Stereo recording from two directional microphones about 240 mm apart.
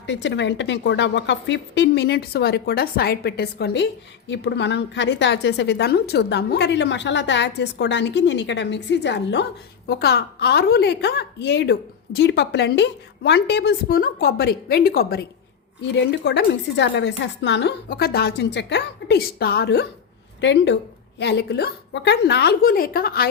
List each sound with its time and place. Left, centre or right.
0.0 s a woman's voice: left